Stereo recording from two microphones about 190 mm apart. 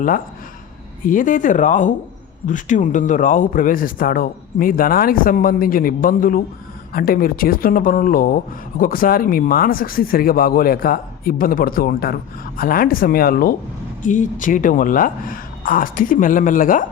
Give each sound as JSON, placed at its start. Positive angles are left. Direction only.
{"t": 1.0, "sound": "speech", "side_deg": 45}